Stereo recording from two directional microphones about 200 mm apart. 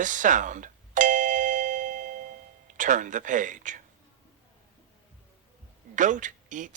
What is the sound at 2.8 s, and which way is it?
A man's voice, 40° right (ahead or behind).